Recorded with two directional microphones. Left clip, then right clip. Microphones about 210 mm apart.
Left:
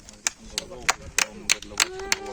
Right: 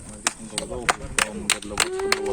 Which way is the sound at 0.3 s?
55° left (ahead or behind).